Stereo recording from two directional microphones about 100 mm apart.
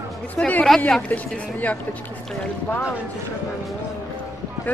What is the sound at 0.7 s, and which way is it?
Speech, 5° left (ahead or behind).